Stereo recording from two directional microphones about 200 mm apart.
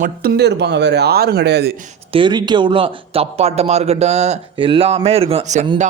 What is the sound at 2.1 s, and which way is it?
A man's voice, 20° right (ahead or behind).